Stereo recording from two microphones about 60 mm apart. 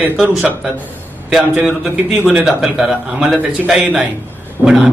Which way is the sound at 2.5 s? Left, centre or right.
Centre.